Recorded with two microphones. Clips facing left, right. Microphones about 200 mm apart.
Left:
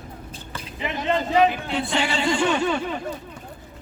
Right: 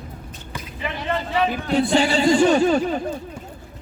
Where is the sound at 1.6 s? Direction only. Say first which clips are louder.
Right 7 dB; 40° right (ahead or behind).